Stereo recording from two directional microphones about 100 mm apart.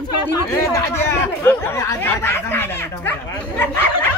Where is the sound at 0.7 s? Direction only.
20° left (ahead or behind).